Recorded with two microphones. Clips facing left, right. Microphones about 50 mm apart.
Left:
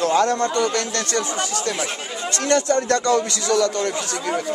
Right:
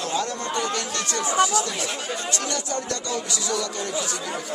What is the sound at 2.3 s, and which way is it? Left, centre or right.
Speech, left.